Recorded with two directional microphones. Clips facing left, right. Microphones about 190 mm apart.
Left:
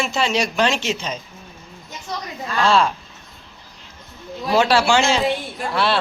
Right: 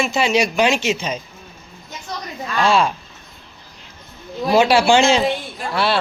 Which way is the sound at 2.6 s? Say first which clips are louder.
Even; 10° right (ahead or behind).